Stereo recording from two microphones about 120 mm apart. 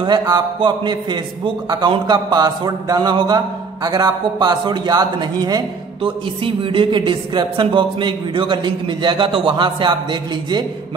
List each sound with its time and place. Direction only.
0.6 s a man's voice: 40° right (ahead or behind)
6.0 s a woman's voice: 45° right (ahead or behind)